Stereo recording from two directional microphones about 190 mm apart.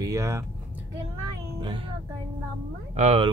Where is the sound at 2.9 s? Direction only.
35° right (ahead or behind).